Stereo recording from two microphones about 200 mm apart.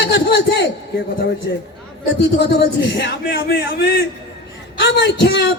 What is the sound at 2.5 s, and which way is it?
Speech, 60° left (ahead or behind).